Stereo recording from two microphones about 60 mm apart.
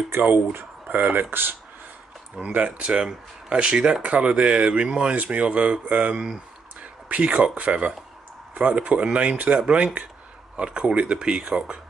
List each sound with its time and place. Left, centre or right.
0.1 s speech: right
2.4 s speech: right